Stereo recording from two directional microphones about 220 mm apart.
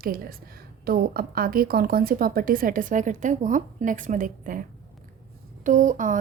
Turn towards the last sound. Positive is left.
turn(degrees=-35)  # may be behind; listen again after turning